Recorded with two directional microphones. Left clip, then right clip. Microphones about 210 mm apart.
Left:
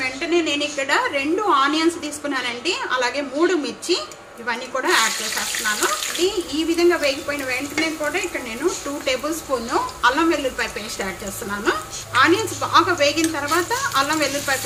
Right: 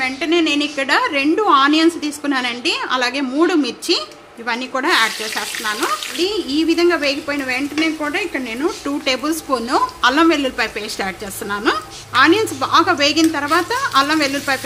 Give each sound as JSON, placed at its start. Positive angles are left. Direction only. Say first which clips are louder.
{"t": 0.0, "sound": "a woman's voice", "louder": "right 4 dB", "side_deg": -50}
{"t": 6.5, "sound": "a woman's voice", "louder": "right 4 dB", "side_deg": -45}